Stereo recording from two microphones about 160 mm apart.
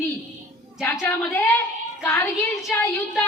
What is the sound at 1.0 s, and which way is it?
A woman's voice, 15° left (ahead or behind).